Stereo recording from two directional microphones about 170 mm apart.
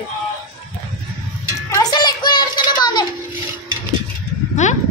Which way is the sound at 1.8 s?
25° left (ahead or behind).